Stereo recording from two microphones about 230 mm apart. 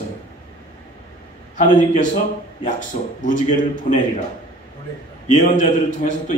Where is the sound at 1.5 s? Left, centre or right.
Left.